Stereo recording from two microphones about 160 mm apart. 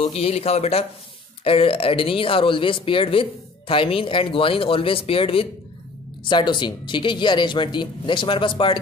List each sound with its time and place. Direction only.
0.0 s speech: 40° left (ahead or behind)